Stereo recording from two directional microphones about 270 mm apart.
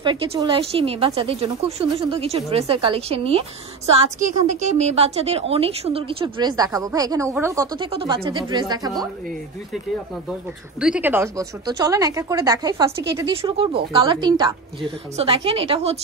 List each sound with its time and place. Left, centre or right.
0.0 s speech: centre
10.8 s speech: centre; by 16.0 s right